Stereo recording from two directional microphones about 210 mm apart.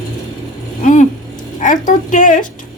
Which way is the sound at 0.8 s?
35° left (ahead or behind).